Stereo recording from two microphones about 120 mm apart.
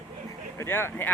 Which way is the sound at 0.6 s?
20° left (ahead or behind).